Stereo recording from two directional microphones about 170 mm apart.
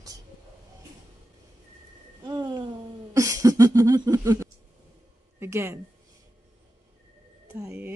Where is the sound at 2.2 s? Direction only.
25° right (ahead or behind).